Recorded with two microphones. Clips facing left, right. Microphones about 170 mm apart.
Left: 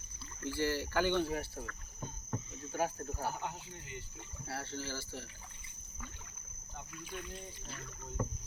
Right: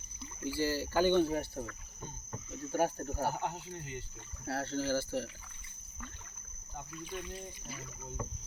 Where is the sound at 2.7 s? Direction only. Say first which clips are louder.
Right 4 dB; 35° right (ahead or behind).